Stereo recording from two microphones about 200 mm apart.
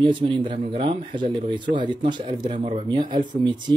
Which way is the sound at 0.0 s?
25° right (ahead or behind).